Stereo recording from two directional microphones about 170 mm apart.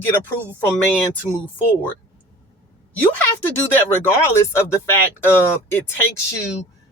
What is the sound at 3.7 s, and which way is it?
Speech, 15° left (ahead or behind).